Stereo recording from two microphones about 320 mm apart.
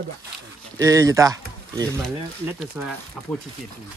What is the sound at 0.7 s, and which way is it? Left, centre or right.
Speech, centre.